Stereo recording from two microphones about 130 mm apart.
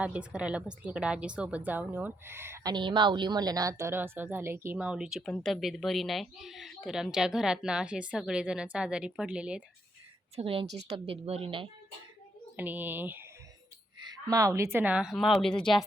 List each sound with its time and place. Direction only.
0.0 s speech: 10° right (ahead or behind)
2.6 s a woman's voice: 35° right (ahead or behind); by 9.6 s 10° right (ahead or behind)
10.3 s speech: 45° right (ahead or behind)
12.5 s speech: 15° right (ahead or behind)
14.0 s speech: 30° right (ahead or behind); by 15.5 s centre (ahead or behind)